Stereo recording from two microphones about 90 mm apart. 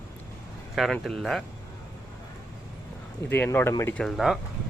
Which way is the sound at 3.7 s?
40° left (ahead or behind).